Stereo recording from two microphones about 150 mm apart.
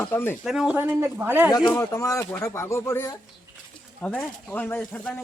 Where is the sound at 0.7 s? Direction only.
15° right (ahead or behind).